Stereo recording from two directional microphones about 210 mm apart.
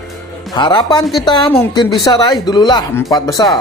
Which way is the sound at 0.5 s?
20° left (ahead or behind).